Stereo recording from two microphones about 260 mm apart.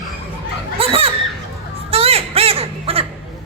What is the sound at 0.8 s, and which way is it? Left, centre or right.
Children playing, right.